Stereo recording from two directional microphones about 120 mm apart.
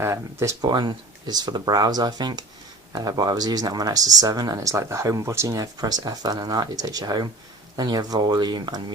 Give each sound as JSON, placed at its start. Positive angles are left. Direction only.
{"t": 0.0, "sound": "speech", "side_deg": -25}